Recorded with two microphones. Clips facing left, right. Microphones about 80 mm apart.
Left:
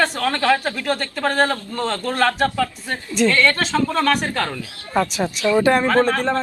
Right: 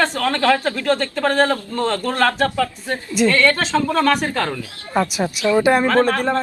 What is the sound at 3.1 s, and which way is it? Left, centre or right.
A woman's voice, centre.